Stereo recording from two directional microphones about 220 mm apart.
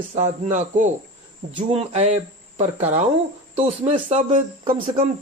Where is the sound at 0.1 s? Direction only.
30° right (ahead or behind).